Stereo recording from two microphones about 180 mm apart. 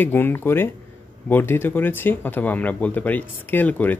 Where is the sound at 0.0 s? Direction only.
10° left (ahead or behind).